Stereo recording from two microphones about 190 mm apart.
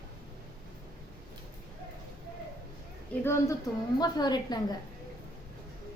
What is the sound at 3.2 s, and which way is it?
A woman's voice, 15° left (ahead or behind).